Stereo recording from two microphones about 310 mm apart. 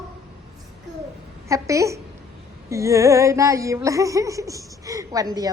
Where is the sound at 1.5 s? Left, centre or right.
Centre.